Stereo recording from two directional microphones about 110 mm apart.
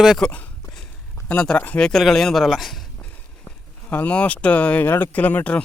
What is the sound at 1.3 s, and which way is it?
Speech, 10° left (ahead or behind).